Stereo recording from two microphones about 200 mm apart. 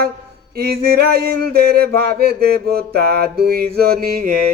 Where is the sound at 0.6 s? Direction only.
50° right (ahead or behind).